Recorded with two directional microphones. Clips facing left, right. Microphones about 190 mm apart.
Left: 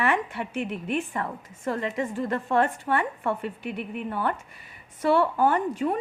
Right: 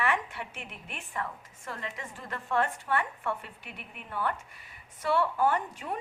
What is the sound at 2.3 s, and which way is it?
Speech, 35° left (ahead or behind).